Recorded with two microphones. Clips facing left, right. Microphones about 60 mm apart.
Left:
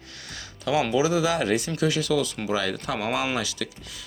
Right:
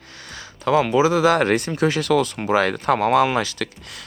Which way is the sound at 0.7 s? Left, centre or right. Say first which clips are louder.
Right 5 dB; right.